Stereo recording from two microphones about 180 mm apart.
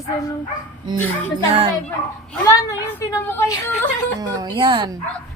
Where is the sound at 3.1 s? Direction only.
15° left (ahead or behind).